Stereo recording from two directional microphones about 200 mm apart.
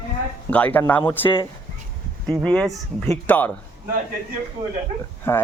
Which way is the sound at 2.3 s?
5° left (ahead or behind).